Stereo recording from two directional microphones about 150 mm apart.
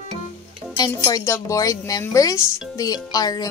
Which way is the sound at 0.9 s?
20° left (ahead or behind).